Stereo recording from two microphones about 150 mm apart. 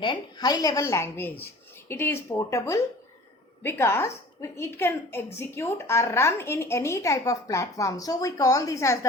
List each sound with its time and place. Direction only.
0.0 s a woman's voice: 30° left (ahead or behind)